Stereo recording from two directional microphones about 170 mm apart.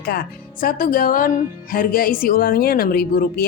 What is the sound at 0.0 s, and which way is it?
Speech, 65° left (ahead or behind).